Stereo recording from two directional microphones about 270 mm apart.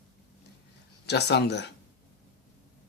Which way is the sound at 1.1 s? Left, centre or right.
Left.